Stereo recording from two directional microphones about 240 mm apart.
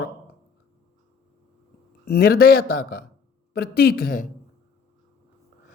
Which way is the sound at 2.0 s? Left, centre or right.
Left.